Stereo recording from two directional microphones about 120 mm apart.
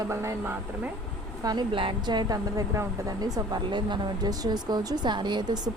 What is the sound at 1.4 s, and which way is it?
A woman's voice, 35° right (ahead or behind).